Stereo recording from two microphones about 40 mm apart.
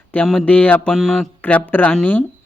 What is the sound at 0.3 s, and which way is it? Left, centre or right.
Speech, left.